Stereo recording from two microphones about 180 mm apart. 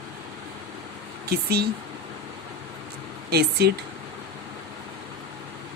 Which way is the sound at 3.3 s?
65° right (ahead or behind).